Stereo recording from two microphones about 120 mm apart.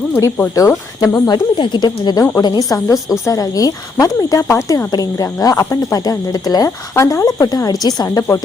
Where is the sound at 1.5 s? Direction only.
40° left (ahead or behind).